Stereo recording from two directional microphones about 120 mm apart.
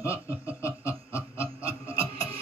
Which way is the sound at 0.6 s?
20° left (ahead or behind).